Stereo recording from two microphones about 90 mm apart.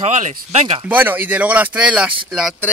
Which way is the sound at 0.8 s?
20° right (ahead or behind).